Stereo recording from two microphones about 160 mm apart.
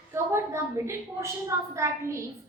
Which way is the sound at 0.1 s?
15° right (ahead or behind).